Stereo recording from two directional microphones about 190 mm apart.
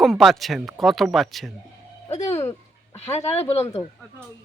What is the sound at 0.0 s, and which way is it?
Speech, centre (ahead or behind).